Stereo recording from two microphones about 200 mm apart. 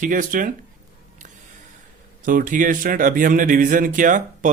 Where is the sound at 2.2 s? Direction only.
45° right (ahead or behind).